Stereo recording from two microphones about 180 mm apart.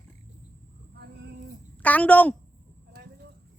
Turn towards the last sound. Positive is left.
turn(degrees=-65)  # may be behind; listen again after turning